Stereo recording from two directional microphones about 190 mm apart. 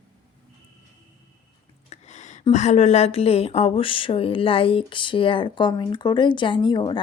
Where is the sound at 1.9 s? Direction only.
35° left (ahead or behind).